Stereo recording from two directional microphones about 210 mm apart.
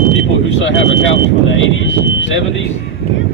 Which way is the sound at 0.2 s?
65° left (ahead or behind).